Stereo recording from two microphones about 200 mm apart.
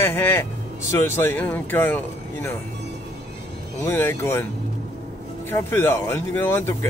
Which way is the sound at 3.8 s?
10° left (ahead or behind).